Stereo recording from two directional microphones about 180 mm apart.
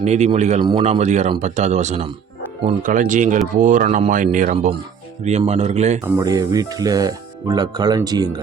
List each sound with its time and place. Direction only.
0.0 s speech: 40° right (ahead or behind)
0.6 s speech: 30° right (ahead or behind)
2.8 s speech: 45° right (ahead or behind)
6.0 s speech: 20° right (ahead or behind)